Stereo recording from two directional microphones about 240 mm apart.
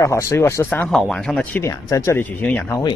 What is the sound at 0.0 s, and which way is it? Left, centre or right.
Speech, centre.